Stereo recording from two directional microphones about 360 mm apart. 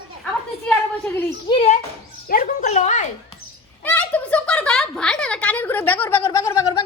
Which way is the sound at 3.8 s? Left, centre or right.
Centre.